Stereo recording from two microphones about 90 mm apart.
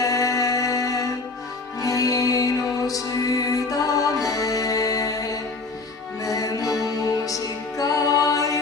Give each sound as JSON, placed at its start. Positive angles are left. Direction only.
{"t": 0.0, "sound": "mantra", "side_deg": 40}
{"t": 1.8, "sound": "music", "side_deg": 40}